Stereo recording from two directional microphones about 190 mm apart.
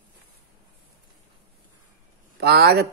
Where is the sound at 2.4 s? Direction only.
60° right (ahead or behind).